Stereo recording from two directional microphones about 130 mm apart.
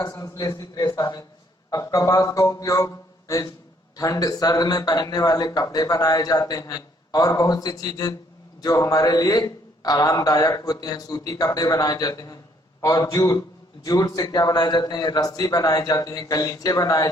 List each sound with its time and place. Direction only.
0.0 s a man's voice: 30° left (ahead or behind)